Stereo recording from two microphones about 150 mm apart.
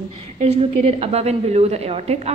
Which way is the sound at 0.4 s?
45° right (ahead or behind).